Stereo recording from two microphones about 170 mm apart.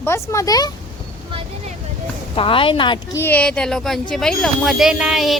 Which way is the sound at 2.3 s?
30° left (ahead or behind).